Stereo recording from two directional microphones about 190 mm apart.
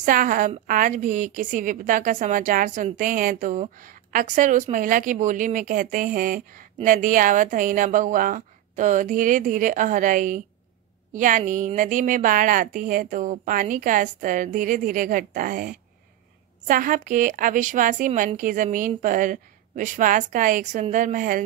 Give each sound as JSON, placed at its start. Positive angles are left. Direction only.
{"t": 0.0, "sound": "a woman's voice", "side_deg": -45}